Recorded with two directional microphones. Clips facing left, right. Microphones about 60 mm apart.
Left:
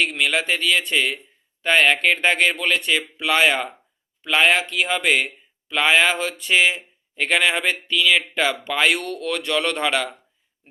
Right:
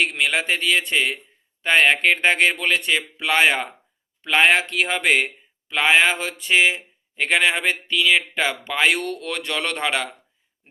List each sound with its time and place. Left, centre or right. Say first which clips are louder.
0.0 s a man's voice: even; right
5.7 s speech: even; right